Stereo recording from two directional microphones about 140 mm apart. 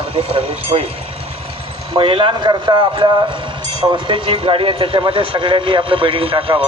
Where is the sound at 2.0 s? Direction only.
35° right (ahead or behind).